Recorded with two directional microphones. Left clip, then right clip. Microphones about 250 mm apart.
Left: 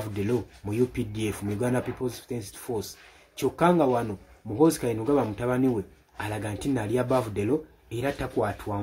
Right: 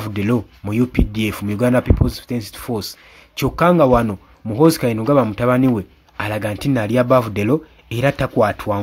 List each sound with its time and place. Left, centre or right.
0.1 s speech: right